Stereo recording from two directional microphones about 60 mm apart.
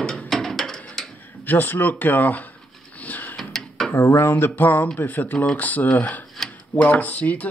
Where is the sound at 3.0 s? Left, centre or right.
Left.